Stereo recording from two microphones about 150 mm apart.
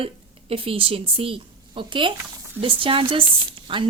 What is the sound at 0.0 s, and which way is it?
A woman's voice, 40° right (ahead or behind).